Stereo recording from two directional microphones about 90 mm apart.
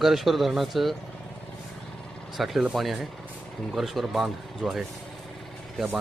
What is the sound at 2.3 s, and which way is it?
Speech, centre (ahead or behind).